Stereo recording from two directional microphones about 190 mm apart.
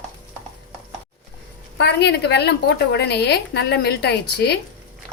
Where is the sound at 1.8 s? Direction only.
60° left (ahead or behind).